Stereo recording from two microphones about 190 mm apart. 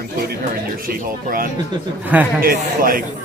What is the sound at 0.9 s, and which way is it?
Speech, 50° right (ahead or behind).